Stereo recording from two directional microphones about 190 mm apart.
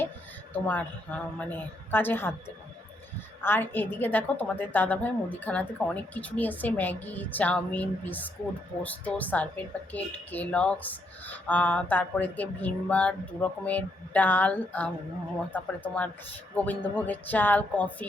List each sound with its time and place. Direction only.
0.5 s speech: 10° left (ahead or behind)